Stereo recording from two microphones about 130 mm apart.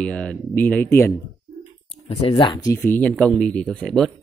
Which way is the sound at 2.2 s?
40° left (ahead or behind).